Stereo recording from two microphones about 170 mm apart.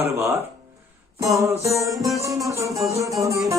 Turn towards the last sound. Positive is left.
turn(degrees=-20)  # may be behind; listen again after turning